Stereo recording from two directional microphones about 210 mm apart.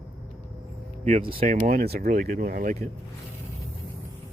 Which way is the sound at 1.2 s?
40° right (ahead or behind).